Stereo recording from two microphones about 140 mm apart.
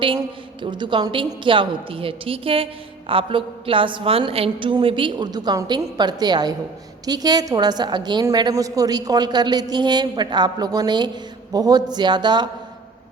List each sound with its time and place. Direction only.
0.2 s a woman's voice: 35° right (ahead or behind)